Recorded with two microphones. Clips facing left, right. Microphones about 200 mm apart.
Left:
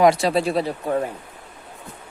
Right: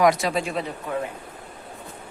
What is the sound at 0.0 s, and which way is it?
Speech, 30° left (ahead or behind).